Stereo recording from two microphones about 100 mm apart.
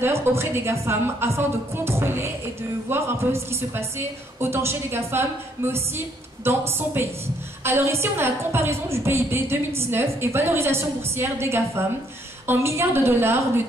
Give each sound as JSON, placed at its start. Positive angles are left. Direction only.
{"t": 0.0, "sound": "a woman's voice", "side_deg": -25}